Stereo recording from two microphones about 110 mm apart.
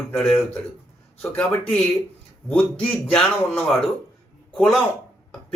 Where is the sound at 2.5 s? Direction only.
10° left (ahead or behind).